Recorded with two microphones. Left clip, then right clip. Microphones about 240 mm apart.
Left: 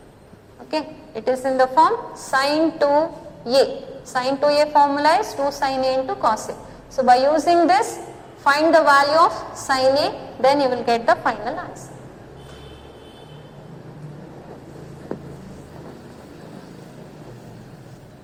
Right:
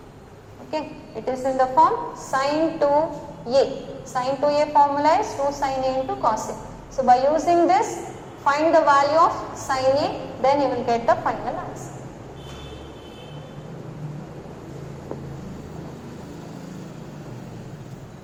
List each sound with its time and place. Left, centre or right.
0.7 s a woman's voice: left